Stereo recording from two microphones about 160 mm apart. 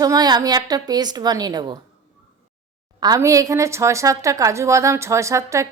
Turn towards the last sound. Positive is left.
turn(degrees=-20)  # may be behind; listen again after turning